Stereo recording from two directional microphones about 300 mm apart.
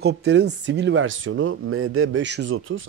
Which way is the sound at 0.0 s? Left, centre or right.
Right.